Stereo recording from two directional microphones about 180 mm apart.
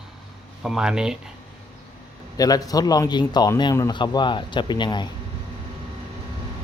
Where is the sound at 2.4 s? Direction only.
20° left (ahead or behind).